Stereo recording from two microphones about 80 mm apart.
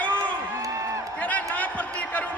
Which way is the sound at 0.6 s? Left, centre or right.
Right.